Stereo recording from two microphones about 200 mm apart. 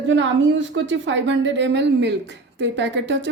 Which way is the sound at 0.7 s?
70° right (ahead or behind).